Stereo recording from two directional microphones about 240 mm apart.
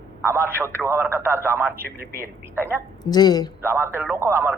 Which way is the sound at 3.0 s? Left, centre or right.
Centre.